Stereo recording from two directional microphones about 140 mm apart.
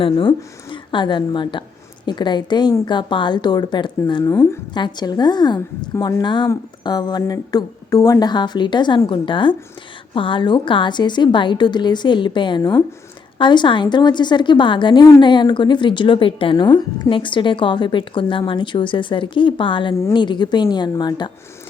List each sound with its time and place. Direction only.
0.0 s a woman's voice: 35° left (ahead or behind); by 4.6 s 20° left (ahead or behind)
4.7 s a woman's voice: 30° left (ahead or behind)